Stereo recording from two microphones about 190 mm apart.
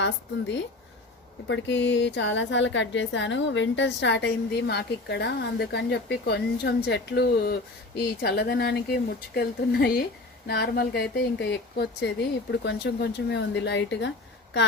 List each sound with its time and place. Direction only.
0.0 s a woman's voice: 70° left (ahead or behind)